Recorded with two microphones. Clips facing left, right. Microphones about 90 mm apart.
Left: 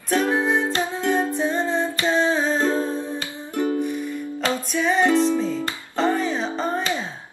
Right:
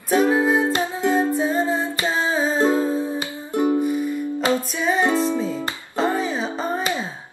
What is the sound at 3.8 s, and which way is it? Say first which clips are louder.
Music: right 4 dB; 10° right (ahead or behind).